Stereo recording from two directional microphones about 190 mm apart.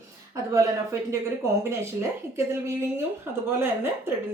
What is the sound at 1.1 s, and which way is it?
A woman's voice, 15° right (ahead or behind).